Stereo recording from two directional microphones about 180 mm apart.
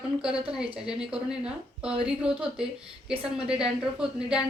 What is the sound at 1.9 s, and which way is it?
Speech, 30° right (ahead or behind).